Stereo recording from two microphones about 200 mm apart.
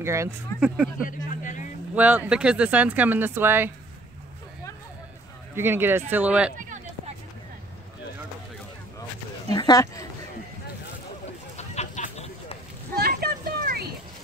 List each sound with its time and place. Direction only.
0.0 s speech: 15° right (ahead or behind)
1.0 s speech: 40° left (ahead or behind)
2.0 s speech: 5° right (ahead or behind)
5.5 s speech: 10° right (ahead or behind)
9.5 s speech: 20° left (ahead or behind)
11.5 s a sound: 35° left (ahead or behind)
13.0 s a sound: 50° right (ahead or behind)